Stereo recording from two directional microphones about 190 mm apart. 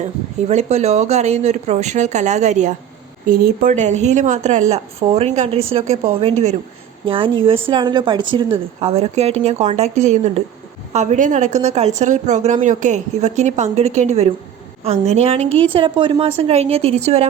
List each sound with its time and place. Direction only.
0.0 s a woman's voice: 35° right (ahead or behind)